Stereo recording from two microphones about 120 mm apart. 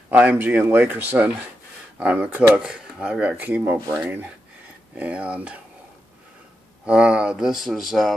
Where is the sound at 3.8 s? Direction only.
35° right (ahead or behind).